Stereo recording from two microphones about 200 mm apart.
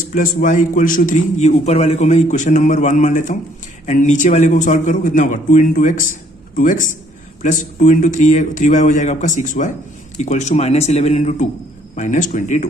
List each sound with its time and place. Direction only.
0.1 s a man's voice: 40° left (ahead or behind)